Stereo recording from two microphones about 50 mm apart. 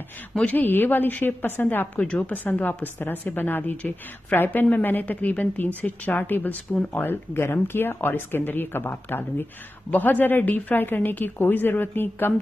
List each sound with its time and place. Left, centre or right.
0.5 s speech: left
2.0 s a woman's voice: centre
2.2 s speech: left
9.8 s speech: left